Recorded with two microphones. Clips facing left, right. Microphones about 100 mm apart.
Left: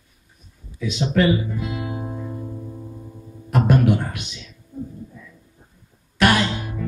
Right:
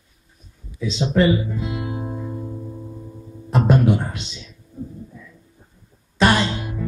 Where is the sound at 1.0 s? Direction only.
15° right (ahead or behind).